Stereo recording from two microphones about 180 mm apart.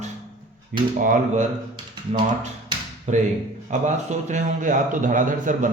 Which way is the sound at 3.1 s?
40° right (ahead or behind).